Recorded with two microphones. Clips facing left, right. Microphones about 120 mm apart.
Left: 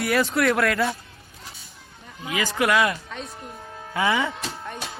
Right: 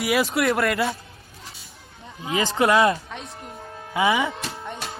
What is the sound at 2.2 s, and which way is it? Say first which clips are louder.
Speech: right 3 dB; 25° right (ahead or behind).